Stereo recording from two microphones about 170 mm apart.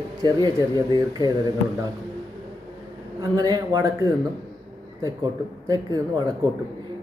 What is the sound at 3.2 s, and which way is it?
Speech, 20° right (ahead or behind).